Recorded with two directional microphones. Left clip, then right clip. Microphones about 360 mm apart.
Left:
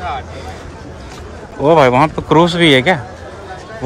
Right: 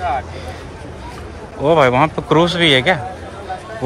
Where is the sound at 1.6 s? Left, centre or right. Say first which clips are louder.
Left 3 dB; centre.